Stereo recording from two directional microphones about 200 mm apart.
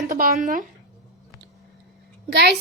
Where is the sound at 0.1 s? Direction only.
45° right (ahead or behind).